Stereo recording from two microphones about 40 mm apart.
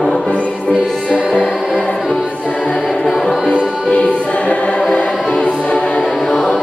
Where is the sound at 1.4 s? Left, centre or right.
Left.